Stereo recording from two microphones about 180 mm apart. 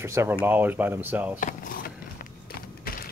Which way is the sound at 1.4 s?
50° left (ahead or behind).